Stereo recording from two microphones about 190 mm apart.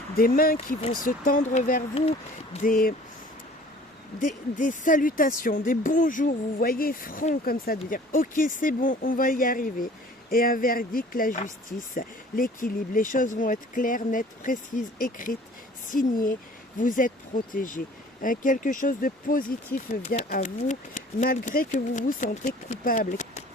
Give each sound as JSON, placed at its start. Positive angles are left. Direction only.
{"t": 0.2, "sound": "speech", "side_deg": 50}
{"t": 2.6, "sound": "speech", "side_deg": 50}
{"t": 4.2, "sound": "speech", "side_deg": 45}